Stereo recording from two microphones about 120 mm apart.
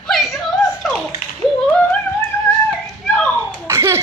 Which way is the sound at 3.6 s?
25° right (ahead or behind).